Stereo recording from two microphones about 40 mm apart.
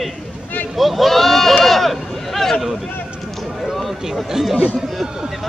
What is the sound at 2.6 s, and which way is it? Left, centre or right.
Speech, centre.